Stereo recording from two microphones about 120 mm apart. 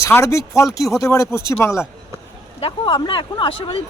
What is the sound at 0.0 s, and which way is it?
Speech, 20° left (ahead or behind).